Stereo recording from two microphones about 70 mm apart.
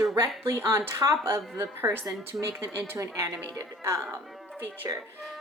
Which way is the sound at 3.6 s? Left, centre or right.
Right.